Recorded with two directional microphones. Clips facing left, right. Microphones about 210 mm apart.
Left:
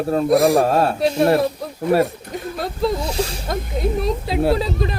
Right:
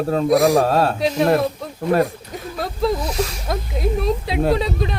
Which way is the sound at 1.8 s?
5° left (ahead or behind).